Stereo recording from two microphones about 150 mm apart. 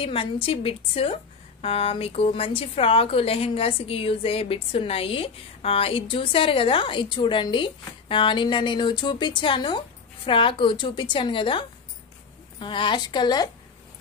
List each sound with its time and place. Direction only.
0.0 s a woman's voice: 40° left (ahead or behind)